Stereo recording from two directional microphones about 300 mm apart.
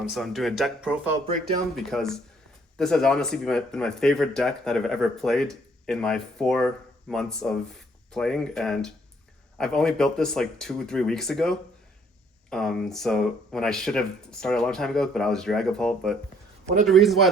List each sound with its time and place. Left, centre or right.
0.0 s speech: centre
1.3 s speech: right
1.7 s speech: centre